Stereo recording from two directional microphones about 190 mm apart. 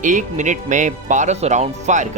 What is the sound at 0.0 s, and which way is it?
Speech, 40° right (ahead or behind).